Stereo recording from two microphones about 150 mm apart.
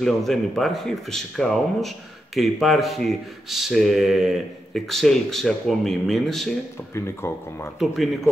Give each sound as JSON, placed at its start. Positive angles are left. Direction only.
{"t": 0.0, "sound": "speech", "side_deg": 0}
{"t": 6.9, "sound": "speech", "side_deg": 15}
{"t": 7.8, "sound": "speech", "side_deg": 0}